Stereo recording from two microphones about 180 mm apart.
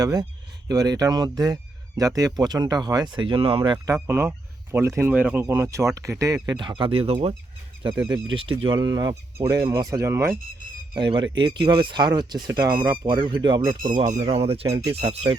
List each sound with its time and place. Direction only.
0.0 s speech: 20° right (ahead or behind)
4.0 s speech: 10° right (ahead or behind)
10.9 s speech: 25° right (ahead or behind)
14.1 s speech: 40° right (ahead or behind)